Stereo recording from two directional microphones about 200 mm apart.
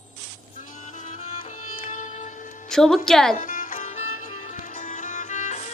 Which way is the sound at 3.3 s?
40° left (ahead or behind).